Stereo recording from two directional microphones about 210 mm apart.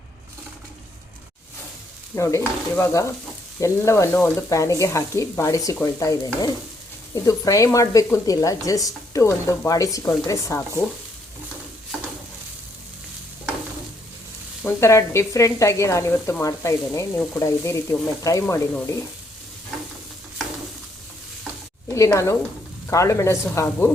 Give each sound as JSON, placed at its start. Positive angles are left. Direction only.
{"t": 2.1, "sound": "speech", "side_deg": 15}
{"t": 14.6, "sound": "speech", "side_deg": 10}
{"t": 21.8, "sound": "a woman's voice", "side_deg": 15}